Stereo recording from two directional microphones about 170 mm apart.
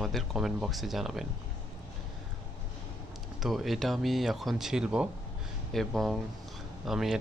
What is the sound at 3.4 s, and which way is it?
Speech, centre (ahead or behind).